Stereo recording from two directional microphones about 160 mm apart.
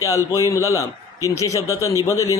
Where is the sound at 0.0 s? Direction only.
20° left (ahead or behind).